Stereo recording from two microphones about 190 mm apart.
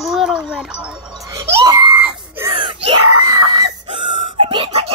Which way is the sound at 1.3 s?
20° right (ahead or behind).